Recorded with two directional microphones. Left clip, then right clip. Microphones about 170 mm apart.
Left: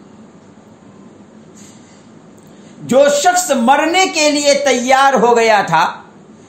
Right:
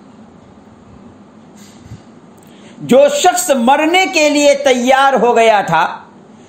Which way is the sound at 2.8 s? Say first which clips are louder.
Right 1 dB; 40° right (ahead or behind).